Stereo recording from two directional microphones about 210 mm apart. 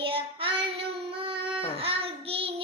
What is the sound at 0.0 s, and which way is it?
Child singing, 25° right (ahead or behind).